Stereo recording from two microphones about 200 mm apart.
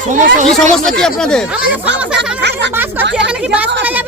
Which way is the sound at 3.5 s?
10° right (ahead or behind).